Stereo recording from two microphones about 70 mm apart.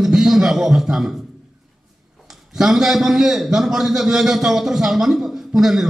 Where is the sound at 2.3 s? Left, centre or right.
Centre.